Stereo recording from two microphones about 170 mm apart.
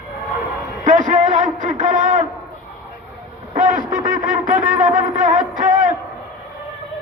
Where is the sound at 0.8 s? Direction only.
50° right (ahead or behind).